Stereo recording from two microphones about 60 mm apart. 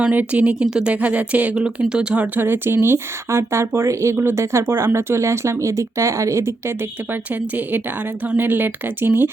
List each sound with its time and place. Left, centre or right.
0.0 s speech: right
0.9 s speech: right
2.4 s speech: right
7.1 s speech: right